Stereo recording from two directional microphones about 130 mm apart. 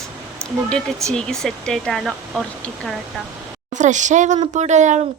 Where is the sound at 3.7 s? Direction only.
70° right (ahead or behind).